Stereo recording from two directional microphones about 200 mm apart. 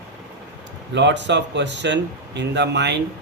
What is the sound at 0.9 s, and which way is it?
Speech, 60° right (ahead or behind).